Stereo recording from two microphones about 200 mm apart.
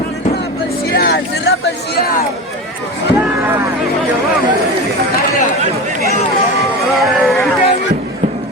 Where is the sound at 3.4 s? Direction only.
15° right (ahead or behind).